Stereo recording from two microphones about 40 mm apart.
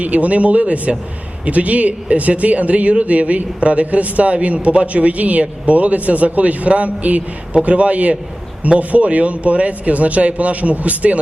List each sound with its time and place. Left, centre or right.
0.0 s a man's voice: right